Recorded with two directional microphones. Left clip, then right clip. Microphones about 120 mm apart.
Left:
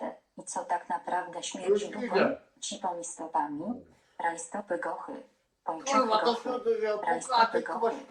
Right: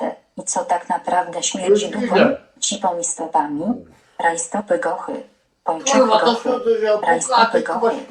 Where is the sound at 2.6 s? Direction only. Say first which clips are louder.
Right 14 dB; 30° right (ahead or behind).